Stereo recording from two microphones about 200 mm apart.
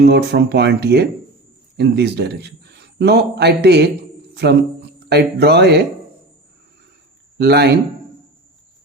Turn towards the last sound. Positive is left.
turn(degrees=-55)  # may be behind; listen again after turning